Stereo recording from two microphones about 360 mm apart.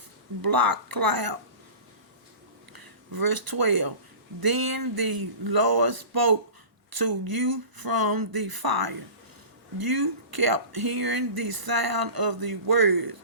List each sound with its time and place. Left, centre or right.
0.4 s speech: right
2.7 s speech: right